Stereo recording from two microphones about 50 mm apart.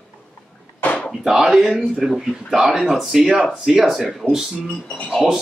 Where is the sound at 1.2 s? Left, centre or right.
Centre.